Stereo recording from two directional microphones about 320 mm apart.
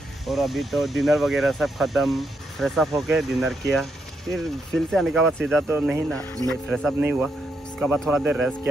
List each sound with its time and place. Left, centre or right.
0.3 s speech: centre